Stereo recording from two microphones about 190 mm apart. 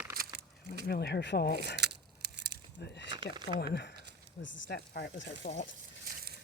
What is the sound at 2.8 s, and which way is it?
Speech, 65° left (ahead or behind).